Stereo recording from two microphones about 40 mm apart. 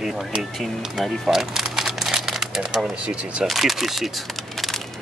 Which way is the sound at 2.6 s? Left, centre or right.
Right.